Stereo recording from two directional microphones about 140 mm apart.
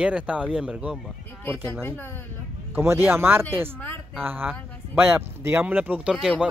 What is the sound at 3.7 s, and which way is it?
Speech, 15° left (ahead or behind).